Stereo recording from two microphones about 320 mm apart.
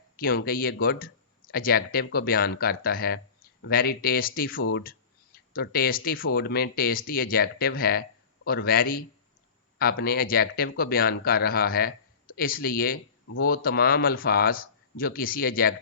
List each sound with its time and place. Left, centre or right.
0.2 s a man's voice: left